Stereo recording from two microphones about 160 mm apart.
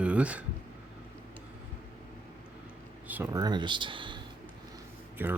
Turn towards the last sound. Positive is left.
turn(degrees=-10)  # may be behind; listen again after turning